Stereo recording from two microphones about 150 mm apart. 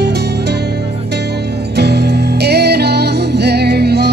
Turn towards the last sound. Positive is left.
turn(degrees=-90)